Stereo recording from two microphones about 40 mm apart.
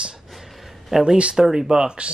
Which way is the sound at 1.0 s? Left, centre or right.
Right.